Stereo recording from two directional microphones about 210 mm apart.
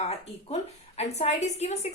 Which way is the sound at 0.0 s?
30° left (ahead or behind).